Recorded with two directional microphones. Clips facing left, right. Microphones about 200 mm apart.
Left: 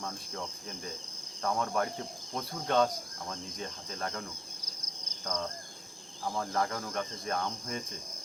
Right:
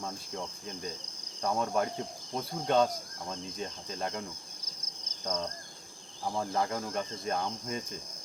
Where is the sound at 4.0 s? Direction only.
20° right (ahead or behind).